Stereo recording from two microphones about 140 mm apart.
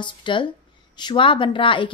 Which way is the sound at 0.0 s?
35° left (ahead or behind).